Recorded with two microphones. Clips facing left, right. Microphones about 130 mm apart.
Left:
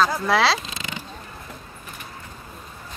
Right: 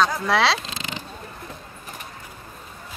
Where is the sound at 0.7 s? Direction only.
30° right (ahead or behind).